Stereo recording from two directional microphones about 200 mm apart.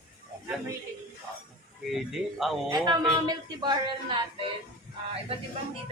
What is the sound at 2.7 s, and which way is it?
Speech, 20° right (ahead or behind).